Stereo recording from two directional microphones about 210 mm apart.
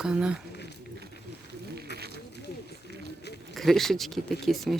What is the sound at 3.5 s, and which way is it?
A man's voice, centre (ahead or behind).